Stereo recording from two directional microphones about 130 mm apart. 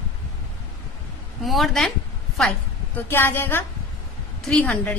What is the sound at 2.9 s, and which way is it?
A woman's voice, 15° left (ahead or behind).